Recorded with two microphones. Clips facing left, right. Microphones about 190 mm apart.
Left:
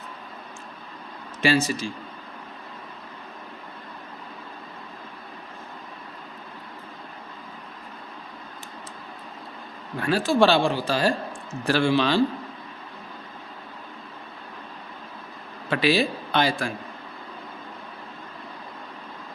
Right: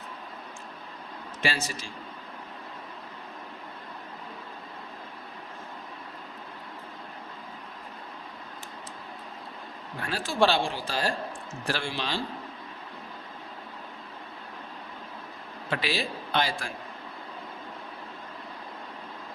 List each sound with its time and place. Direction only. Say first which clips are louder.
1.4 s a man's voice: left 9 dB; 90° left
10.0 s a man's voice: left 6 dB; 80° left
15.7 s a man's voice: left 9 dB; 75° left (ahead or behind)